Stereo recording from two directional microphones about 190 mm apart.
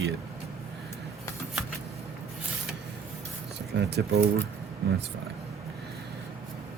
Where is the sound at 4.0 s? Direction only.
65° right (ahead or behind).